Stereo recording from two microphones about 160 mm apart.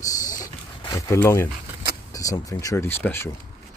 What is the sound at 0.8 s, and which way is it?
Speech, 20° left (ahead or behind).